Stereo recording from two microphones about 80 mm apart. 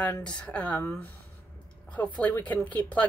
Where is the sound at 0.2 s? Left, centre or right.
Centre.